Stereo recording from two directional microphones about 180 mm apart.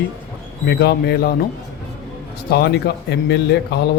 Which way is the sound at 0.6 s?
65° left (ahead or behind).